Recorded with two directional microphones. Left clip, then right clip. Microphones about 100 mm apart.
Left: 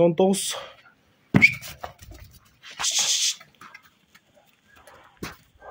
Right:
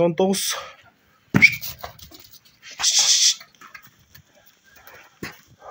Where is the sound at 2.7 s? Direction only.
15° left (ahead or behind).